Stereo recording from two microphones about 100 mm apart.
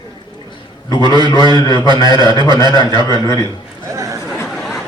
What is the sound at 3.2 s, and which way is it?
Speech, 35° left (ahead or behind).